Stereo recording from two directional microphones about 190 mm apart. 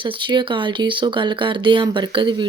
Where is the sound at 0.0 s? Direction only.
25° right (ahead or behind).